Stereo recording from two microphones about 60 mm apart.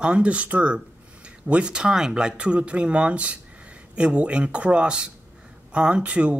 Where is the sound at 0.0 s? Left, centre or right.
Centre.